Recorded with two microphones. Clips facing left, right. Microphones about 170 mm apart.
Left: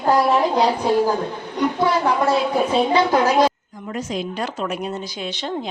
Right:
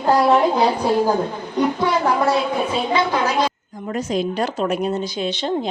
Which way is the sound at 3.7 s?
40° right (ahead or behind).